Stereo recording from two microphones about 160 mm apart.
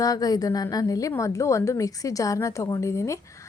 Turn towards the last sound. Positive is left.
turn(degrees=20)  # may be behind; listen again after turning